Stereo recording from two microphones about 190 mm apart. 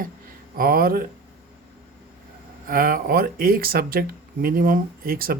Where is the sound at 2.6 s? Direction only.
50° right (ahead or behind).